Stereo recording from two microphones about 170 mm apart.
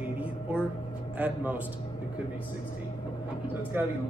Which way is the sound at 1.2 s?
10° right (ahead or behind).